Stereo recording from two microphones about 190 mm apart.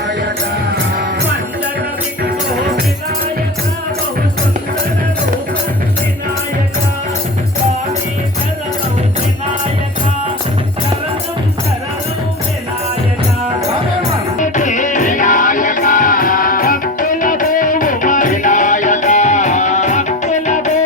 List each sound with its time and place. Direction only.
14.3 s music: 40° left (ahead or behind)